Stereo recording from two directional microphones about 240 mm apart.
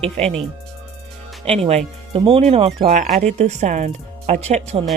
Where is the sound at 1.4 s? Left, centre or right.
Right.